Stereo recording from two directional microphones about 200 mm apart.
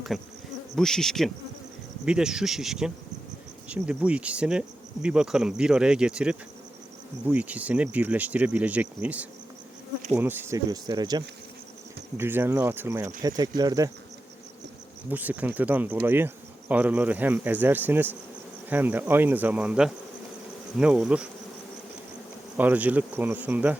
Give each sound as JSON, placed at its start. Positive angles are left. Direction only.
{"t": 0.1, "sound": "speech", "side_deg": 0}
{"t": 7.3, "sound": "insect", "side_deg": -5}
{"t": 15.1, "sound": "insect", "side_deg": -10}
{"t": 20.7, "sound": "speech", "side_deg": -5}
{"t": 22.5, "sound": "insect", "side_deg": -10}